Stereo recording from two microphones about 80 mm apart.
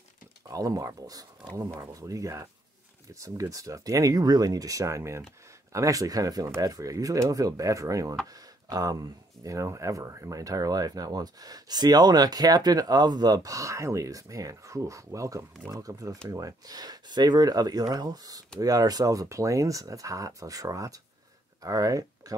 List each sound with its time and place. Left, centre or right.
0.5 s speech: right